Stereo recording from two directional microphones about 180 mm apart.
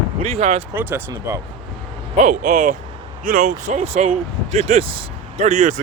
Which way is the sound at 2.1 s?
45° right (ahead or behind).